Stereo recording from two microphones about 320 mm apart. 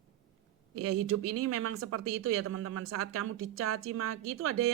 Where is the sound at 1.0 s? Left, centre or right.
Right.